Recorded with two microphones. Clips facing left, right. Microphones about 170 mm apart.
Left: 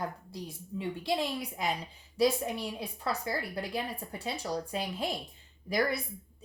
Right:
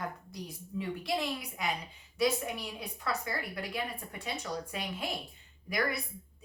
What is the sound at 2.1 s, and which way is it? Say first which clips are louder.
A woman's voice: left 3 dB; 30° left (ahead or behind).